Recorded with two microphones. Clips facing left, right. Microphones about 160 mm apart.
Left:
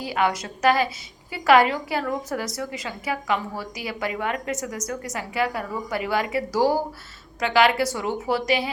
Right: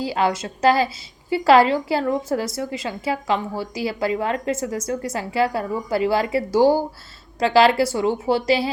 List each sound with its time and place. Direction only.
0.0 s a woman's voice: 30° right (ahead or behind)